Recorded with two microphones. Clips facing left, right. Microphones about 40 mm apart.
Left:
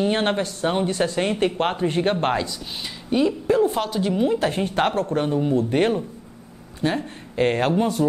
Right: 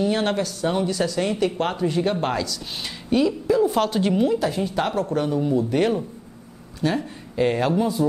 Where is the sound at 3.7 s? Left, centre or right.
Centre.